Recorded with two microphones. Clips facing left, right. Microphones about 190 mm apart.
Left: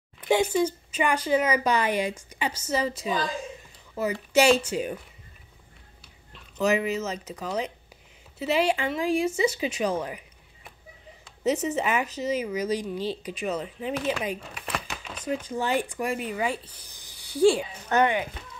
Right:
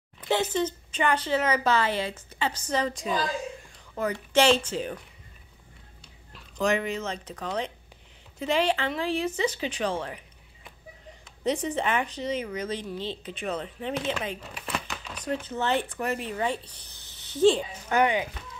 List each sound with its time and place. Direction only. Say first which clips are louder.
0.3 s a woman's voice: left 3 dB; 10° left (ahead or behind)
6.3 s a woman's voice: left 2 dB; 5° left (ahead or behind)
11.4 s a woman's voice: left 2 dB; 5° left (ahead or behind)
17.8 s speech: left 1 dB; 15° right (ahead or behind)